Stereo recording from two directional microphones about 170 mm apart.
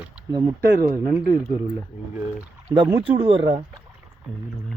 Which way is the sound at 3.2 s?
30° right (ahead or behind).